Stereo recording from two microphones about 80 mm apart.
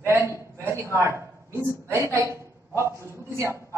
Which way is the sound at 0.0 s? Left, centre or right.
Right.